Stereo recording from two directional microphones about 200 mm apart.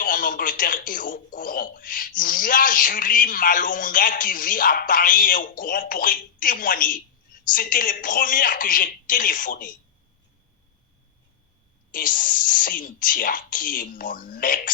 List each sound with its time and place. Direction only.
0.0 s speech: 45° left (ahead or behind)
11.9 s speech: 45° left (ahead or behind)